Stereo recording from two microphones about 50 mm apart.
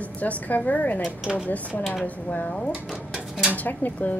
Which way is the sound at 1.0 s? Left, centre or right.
Centre.